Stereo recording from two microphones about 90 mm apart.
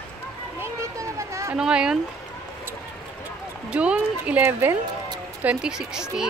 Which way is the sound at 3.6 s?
15° right (ahead or behind).